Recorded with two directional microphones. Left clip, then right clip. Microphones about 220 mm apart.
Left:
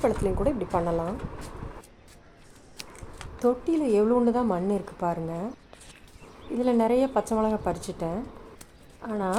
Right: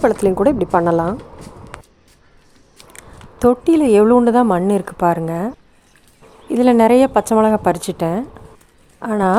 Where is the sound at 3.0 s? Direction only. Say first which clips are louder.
Right 12 dB; 40° right (ahead or behind).